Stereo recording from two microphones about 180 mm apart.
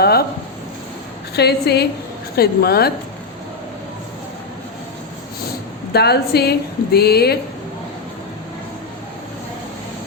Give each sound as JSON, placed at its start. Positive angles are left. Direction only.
{"t": 0.0, "sound": "a sound", "side_deg": 60}
{"t": 1.4, "sound": "speech", "side_deg": 65}
{"t": 5.9, "sound": "speech", "side_deg": 65}